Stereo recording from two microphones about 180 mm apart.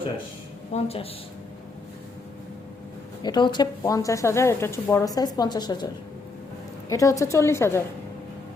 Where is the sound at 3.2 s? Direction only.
25° left (ahead or behind).